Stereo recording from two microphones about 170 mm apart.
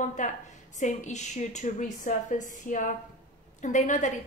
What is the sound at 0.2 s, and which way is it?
A woman's voice, 45° left (ahead or behind).